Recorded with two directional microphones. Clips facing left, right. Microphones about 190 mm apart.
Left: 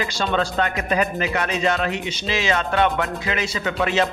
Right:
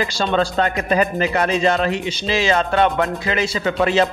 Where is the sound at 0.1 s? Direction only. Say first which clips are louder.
Right 3 dB; 35° right (ahead or behind).